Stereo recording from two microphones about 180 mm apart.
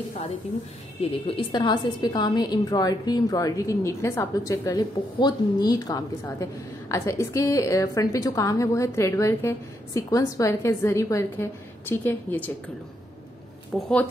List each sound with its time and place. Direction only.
1.1 s a woman's voice: 30° left (ahead or behind); by 12.5 s 10° left (ahead or behind)
13.7 s speech: centre (ahead or behind)